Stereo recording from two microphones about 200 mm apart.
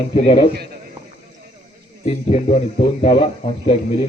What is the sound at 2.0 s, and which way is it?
A man's voice, 35° left (ahead or behind).